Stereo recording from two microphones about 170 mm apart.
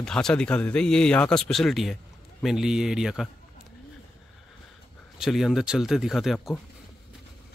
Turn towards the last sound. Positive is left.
turn(degrees=0)  # may be behind; listen again after turning